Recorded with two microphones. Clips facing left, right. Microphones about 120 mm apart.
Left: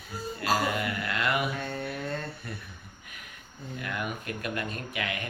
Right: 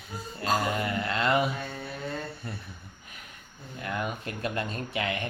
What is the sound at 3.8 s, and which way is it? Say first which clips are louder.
Speech: right 3 dB; 25° right (ahead or behind).